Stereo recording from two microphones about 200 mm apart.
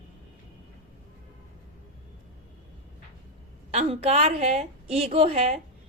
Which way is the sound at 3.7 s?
30° right (ahead or behind).